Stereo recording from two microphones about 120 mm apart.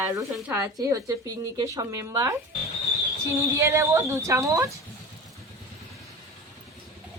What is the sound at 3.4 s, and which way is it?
A woman's voice, 25° right (ahead or behind).